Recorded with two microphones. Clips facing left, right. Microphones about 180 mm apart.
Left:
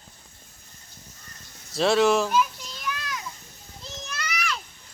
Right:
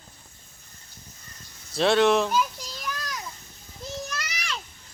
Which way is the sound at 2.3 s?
40° right (ahead or behind).